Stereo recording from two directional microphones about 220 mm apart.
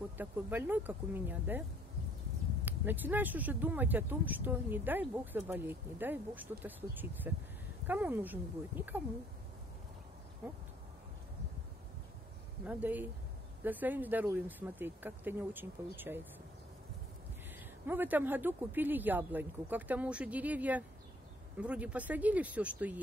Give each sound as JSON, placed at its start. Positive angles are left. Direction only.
{"t": 0.2, "sound": "speech", "side_deg": -10}
{"t": 2.6, "sound": "speech", "side_deg": -10}
{"t": 10.4, "sound": "speech", "side_deg": -5}
{"t": 12.6, "sound": "speech", "side_deg": -10}
{"t": 17.8, "sound": "speech", "side_deg": -10}